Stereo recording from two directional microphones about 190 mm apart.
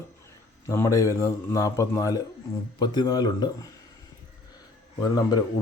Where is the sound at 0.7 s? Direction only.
15° left (ahead or behind).